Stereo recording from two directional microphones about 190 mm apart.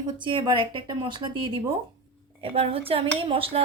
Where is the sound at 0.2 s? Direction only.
25° right (ahead or behind).